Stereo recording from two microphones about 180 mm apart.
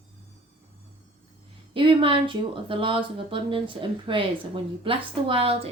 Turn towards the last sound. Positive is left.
turn(degrees=-30)  # may be behind; listen again after turning